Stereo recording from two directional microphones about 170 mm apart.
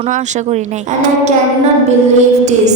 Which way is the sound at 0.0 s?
45° right (ahead or behind).